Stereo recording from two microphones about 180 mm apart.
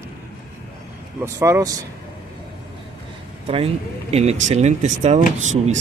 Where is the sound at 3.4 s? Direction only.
35° right (ahead or behind).